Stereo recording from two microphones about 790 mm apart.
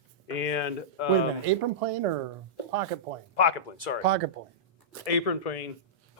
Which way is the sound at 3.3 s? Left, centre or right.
Left.